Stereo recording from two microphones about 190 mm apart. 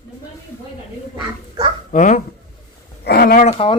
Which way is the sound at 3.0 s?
55° left (ahead or behind).